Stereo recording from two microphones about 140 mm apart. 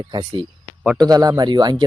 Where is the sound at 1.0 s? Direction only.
25° right (ahead or behind).